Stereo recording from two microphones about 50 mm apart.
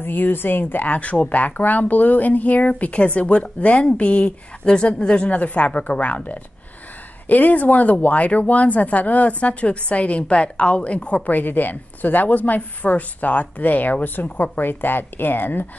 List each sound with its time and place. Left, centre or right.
0.0 s speech: left
11.2 s speech: left